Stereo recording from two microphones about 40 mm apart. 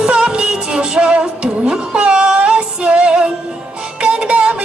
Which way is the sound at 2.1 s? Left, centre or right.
Right.